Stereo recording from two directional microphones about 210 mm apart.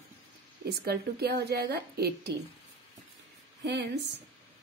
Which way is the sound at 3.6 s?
55° right (ahead or behind).